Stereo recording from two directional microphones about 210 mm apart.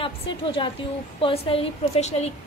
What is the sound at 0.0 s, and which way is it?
A woman's voice, 25° left (ahead or behind).